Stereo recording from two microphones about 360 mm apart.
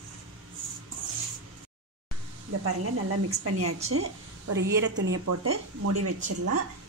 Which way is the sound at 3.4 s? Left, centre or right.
Right.